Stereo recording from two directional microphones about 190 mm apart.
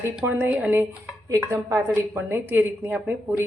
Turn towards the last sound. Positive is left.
turn(degrees=-5)  # may be behind; listen again after turning